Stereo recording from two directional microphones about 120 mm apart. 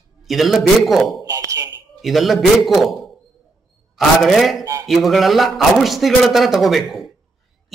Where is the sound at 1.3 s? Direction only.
30° right (ahead or behind).